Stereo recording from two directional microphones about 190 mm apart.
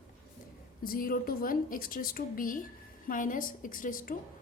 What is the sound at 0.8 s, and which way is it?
A woman's voice, 50° left (ahead or behind).